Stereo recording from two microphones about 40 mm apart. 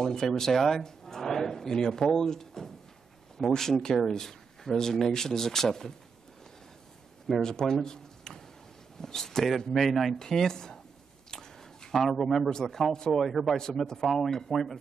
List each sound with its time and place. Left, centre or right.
0.0 s speech: centre
7.4 s speech: centre
10.1 s speech: centre
11.2 s a sound: centre
11.9 s speech: centre
13.3 s speech: centre
13.6 s speech: centre